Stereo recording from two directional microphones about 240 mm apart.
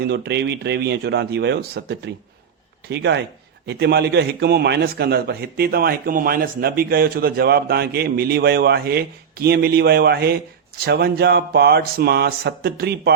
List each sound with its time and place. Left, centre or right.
0.0 s a man's voice: right